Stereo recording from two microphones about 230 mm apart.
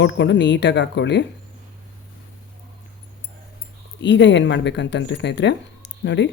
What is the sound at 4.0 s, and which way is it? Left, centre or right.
Speech, left.